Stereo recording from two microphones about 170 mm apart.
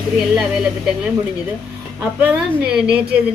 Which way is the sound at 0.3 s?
5° right (ahead or behind).